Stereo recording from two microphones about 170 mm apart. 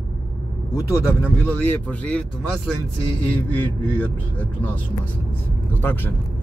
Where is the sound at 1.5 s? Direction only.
10° left (ahead or behind).